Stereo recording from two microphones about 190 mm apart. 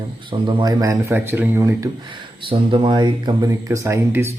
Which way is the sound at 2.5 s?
25° right (ahead or behind).